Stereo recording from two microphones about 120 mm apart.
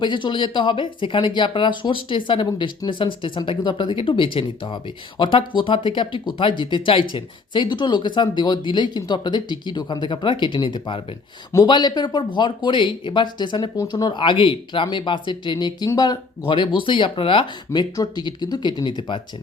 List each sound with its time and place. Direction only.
0.0 s speech: 40° left (ahead or behind)
17.7 s speech: 30° left (ahead or behind)